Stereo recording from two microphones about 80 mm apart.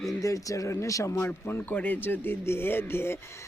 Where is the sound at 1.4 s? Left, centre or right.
Left.